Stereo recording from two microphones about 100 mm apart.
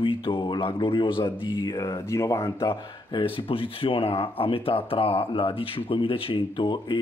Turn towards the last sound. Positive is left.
turn(degrees=50)  # may be behind; listen again after turning